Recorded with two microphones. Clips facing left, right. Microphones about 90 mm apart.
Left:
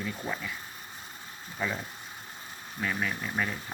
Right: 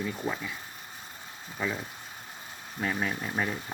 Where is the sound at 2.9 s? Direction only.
30° right (ahead or behind).